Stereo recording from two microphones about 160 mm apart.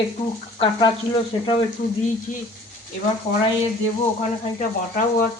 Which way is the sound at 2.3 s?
50° left (ahead or behind).